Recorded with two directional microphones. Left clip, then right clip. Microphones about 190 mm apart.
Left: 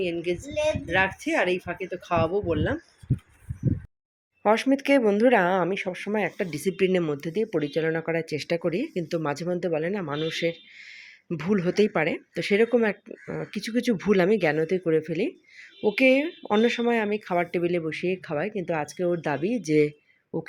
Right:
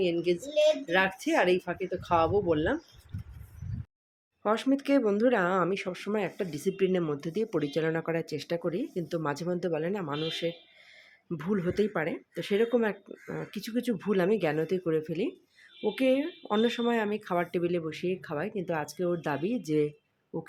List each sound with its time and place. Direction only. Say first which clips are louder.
0.3 s a woman's voice: right 3 dB; 5° left (ahead or behind)
4.4 s speech: left 6 dB; 15° left (ahead or behind)